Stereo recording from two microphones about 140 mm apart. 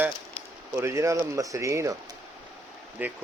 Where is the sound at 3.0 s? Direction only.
10° right (ahead or behind).